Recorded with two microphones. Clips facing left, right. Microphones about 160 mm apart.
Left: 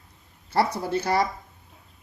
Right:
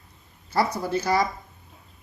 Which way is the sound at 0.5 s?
30° left (ahead or behind).